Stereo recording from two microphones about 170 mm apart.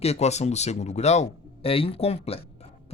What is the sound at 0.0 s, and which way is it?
Speech, 40° left (ahead or behind).